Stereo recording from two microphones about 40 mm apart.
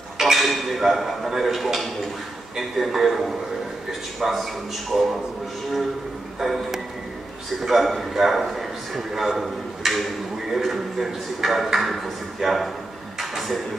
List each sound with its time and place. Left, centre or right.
0.2 s a man's voice: centre
4.9 s a man's voice: centre
6.4 s a man's voice: centre
13.2 s a sound: centre